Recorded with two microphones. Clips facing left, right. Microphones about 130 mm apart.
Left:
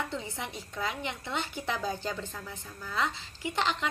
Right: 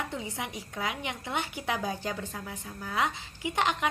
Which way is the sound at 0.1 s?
15° right (ahead or behind).